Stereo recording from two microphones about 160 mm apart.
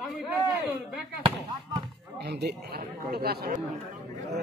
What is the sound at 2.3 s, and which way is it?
Speech, 90° right.